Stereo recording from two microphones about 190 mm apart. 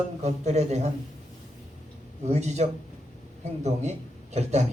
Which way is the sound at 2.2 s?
35° right (ahead or behind).